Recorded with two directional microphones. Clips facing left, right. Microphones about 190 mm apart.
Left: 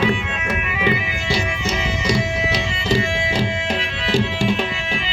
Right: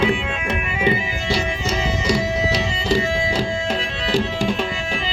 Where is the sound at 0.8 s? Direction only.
25° right (ahead or behind).